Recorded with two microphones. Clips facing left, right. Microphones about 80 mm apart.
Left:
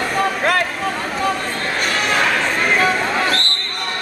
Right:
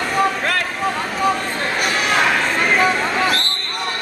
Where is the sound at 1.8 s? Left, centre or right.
Centre.